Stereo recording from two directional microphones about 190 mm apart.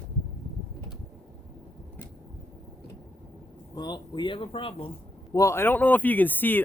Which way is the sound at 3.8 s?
20° left (ahead or behind).